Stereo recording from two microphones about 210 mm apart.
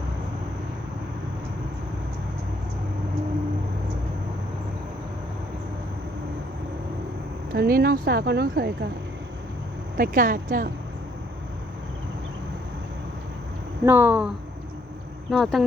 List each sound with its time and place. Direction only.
7.5 s speech: 45° right (ahead or behind)
10.0 s speech: 40° right (ahead or behind)
13.8 s speech: 10° right (ahead or behind)